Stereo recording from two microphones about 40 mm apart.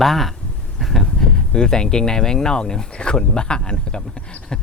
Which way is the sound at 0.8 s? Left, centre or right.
Centre.